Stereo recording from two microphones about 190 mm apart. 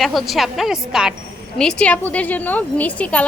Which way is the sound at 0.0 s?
Centre (ahead or behind).